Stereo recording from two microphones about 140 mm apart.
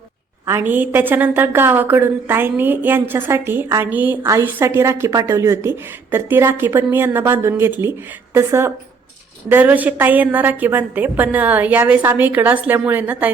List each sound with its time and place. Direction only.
0.4 s a woman's voice: 15° right (ahead or behind)